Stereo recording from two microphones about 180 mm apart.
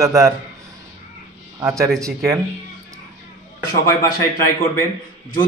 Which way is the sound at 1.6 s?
15° right (ahead or behind).